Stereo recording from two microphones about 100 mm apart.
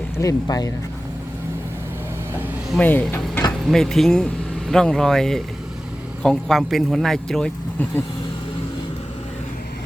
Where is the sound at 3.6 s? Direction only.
5° left (ahead or behind).